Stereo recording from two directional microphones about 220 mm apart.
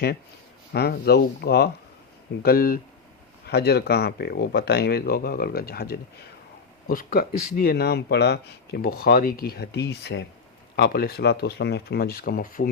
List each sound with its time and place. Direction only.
0.7 s speech: 45° left (ahead or behind)